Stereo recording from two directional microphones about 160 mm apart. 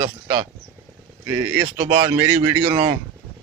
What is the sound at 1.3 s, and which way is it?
A man's voice, 15° right (ahead or behind).